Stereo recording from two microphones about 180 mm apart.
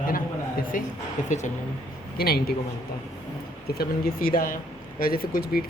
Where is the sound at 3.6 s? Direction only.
60° left (ahead or behind).